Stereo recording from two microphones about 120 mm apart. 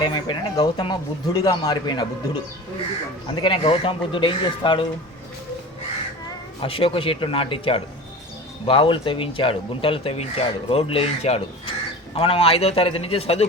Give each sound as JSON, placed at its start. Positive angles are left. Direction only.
{"t": 0.0, "sound": "speech", "side_deg": 35}
{"t": 3.4, "sound": "speech", "side_deg": 50}
{"t": 6.6, "sound": "speech", "side_deg": 50}